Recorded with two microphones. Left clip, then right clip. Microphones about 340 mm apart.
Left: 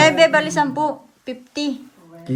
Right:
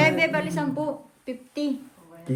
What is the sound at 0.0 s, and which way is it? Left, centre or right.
A woman's voice, centre.